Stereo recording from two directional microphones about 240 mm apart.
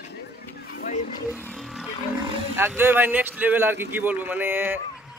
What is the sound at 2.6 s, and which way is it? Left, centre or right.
A man's voice, centre.